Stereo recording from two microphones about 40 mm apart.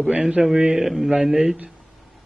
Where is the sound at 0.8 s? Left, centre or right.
Centre.